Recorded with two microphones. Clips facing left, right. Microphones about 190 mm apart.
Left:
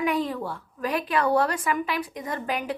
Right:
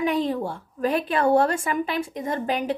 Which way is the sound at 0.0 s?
25° right (ahead or behind).